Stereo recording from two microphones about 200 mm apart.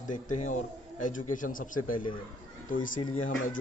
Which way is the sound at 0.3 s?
35° left (ahead or behind).